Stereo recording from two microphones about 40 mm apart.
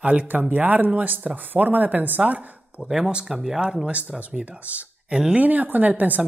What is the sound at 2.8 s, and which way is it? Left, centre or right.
Speech, centre.